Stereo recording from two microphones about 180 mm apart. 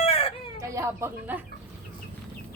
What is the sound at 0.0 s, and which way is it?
Baby cry, 30° left (ahead or behind).